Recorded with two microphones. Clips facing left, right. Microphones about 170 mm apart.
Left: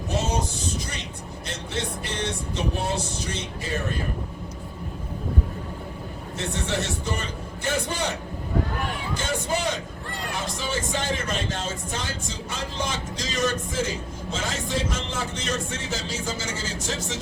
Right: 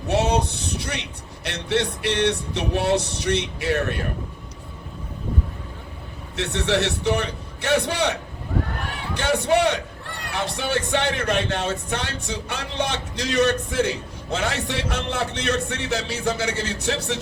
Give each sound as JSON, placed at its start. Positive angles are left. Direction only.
{"t": 0.1, "sound": "a sound", "side_deg": -65}
{"t": 1.5, "sound": "music", "side_deg": -70}
{"t": 6.3, "sound": "music", "side_deg": -70}
{"t": 10.2, "sound": "speech", "side_deg": -65}